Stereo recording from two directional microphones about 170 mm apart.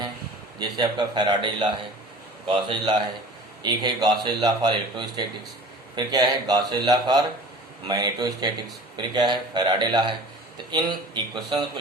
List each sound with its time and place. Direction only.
0.6 s a man's voice: 25° right (ahead or behind)